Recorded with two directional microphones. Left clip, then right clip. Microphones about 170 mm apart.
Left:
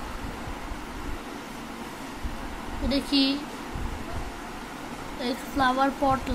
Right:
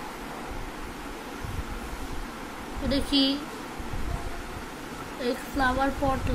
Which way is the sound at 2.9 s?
5° left (ahead or behind).